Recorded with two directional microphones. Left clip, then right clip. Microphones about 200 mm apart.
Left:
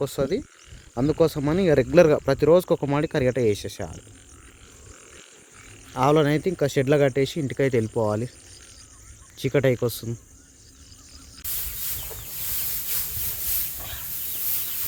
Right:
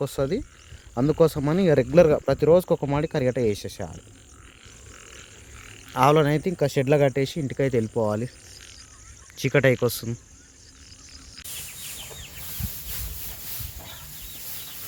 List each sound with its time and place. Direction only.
0.0 s speech: 5° right (ahead or behind)
6.0 s speech: 5° left (ahead or behind)
9.4 s speech: centre (ahead or behind)